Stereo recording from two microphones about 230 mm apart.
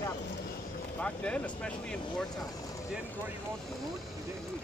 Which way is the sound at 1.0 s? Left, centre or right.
Centre.